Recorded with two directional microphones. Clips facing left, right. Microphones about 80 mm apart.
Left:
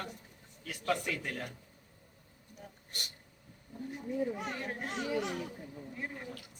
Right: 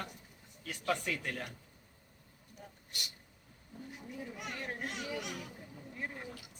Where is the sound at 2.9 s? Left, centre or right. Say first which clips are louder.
Left 1 dB; left.